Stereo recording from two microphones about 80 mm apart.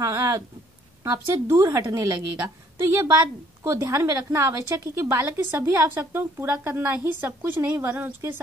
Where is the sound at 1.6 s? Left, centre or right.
Right.